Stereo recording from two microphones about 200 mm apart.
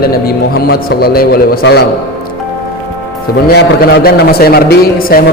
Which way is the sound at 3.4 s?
55° left (ahead or behind).